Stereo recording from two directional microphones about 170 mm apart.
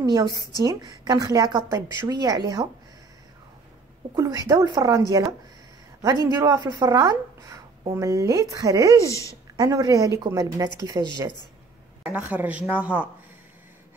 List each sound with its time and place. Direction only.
0.0 s a woman's voice: 25° right (ahead or behind)
0.4 s a woman's voice: 25° left (ahead or behind)
0.7 s a woman's voice: 25° right (ahead or behind)
4.1 s a woman's voice: 20° right (ahead or behind)
6.3 s a woman's voice: 25° right (ahead or behind)
8.9 s a woman's voice: 20° left (ahead or behind)
9.6 s a woman's voice: 20° right (ahead or behind)
12.0 s a woman's voice: 10° right (ahead or behind)